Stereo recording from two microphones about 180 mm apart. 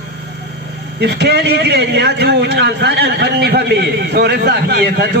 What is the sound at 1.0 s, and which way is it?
A man's voice, 70° right (ahead or behind).